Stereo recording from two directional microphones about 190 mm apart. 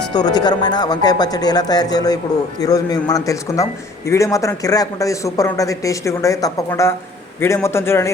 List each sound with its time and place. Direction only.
0.1 s speech: 20° left (ahead or behind)